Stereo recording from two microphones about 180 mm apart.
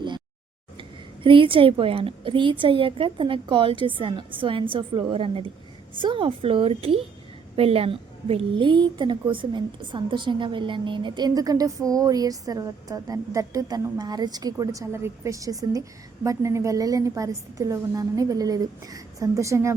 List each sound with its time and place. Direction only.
0.8 s a woman's voice: 30° right (ahead or behind)